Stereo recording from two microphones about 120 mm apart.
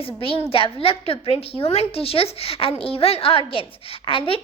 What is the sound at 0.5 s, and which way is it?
A woman's voice, 50° left (ahead or behind).